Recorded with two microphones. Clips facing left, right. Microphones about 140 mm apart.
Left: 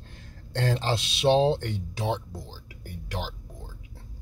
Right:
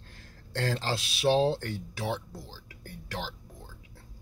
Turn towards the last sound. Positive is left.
turn(degrees=15)  # may be behind; listen again after turning